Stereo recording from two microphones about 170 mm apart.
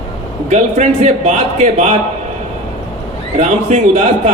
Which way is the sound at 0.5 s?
40° right (ahead or behind).